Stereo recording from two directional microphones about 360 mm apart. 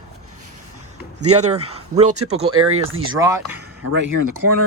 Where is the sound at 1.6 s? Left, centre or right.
Centre.